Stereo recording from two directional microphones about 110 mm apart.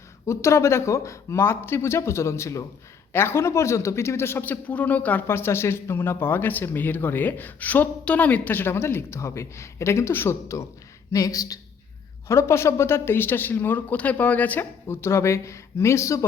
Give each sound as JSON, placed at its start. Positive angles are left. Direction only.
{"t": 0.3, "sound": "a man's voice", "side_deg": 25}